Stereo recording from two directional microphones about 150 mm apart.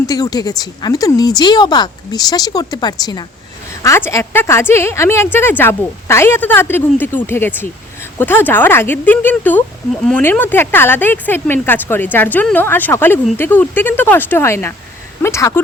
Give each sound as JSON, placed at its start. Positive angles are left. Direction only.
{"t": 0.1, "sound": "a woman's voice", "side_deg": 25}